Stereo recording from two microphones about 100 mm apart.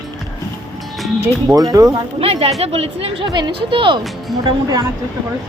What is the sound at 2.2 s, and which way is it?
A woman's voice, 85° right.